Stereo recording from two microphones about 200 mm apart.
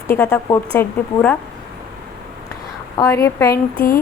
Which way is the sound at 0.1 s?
5° left (ahead or behind).